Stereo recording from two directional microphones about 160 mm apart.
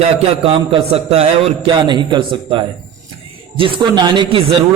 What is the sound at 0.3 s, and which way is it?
A man's voice, 40° right (ahead or behind).